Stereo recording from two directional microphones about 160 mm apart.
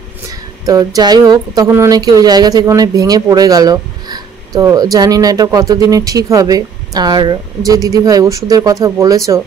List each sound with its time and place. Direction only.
0.7 s speech: 25° right (ahead or behind)